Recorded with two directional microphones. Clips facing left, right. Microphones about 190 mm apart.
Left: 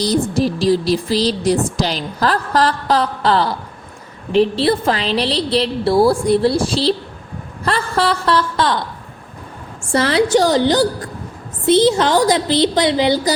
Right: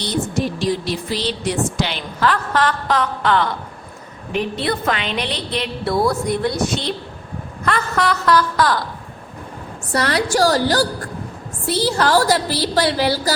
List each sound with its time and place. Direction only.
0.0 s a woman's voice: 35° left (ahead or behind)
9.9 s a woman's voice: 25° left (ahead or behind)